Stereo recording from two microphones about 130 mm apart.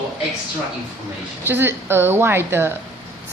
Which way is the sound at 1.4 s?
15° right (ahead or behind).